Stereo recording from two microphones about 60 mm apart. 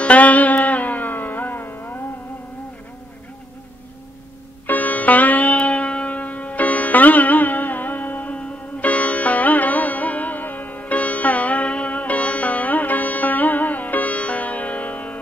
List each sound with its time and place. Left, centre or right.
0.0 s music: left
4.6 s music: left